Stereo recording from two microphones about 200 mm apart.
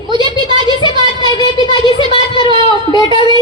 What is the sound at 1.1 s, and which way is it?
Speech, 20° left (ahead or behind).